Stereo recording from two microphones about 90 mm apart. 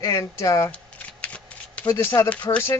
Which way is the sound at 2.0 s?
30° left (ahead or behind).